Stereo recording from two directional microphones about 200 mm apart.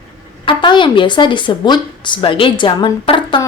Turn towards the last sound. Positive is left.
turn(degrees=25)  # may be behind; listen again after turning